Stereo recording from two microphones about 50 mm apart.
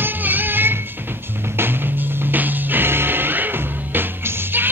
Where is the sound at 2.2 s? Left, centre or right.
Right.